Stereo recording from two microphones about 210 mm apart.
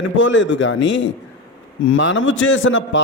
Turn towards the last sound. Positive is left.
turn(degrees=65)  # may be behind; listen again after turning